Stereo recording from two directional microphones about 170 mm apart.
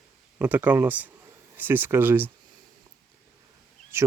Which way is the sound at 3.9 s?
15° right (ahead or behind).